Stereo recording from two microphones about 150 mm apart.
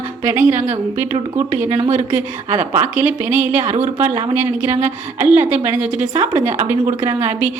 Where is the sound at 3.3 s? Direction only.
60° right (ahead or behind).